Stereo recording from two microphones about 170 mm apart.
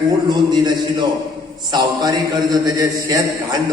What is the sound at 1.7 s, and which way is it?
A man's voice, 25° right (ahead or behind).